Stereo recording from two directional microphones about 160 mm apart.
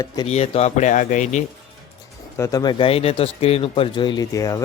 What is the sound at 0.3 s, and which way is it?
Speech, 40° left (ahead or behind).